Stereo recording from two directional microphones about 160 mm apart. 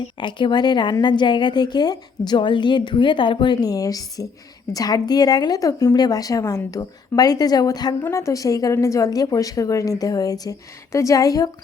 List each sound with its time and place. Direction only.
0.2 s a woman's voice: 30° left (ahead or behind)